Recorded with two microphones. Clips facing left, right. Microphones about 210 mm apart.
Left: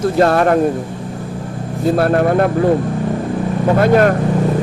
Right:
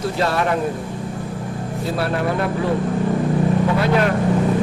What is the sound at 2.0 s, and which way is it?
Speech, 50° left (ahead or behind).